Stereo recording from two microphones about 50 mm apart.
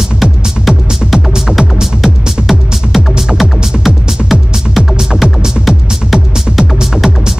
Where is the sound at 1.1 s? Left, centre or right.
Centre.